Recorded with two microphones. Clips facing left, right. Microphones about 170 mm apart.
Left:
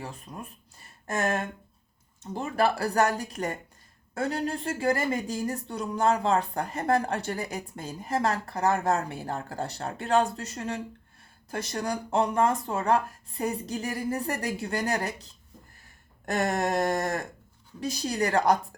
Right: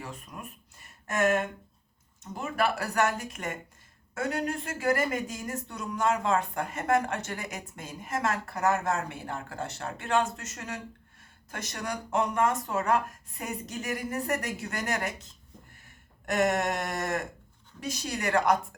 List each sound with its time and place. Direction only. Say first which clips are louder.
0.0 s speech: left 2 dB; 30° left (ahead or behind)